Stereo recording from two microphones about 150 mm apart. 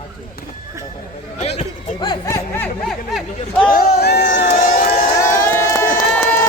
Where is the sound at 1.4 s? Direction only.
45° left (ahead or behind).